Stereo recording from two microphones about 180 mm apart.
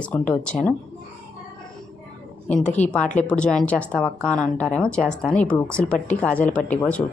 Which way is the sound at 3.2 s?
5° left (ahead or behind).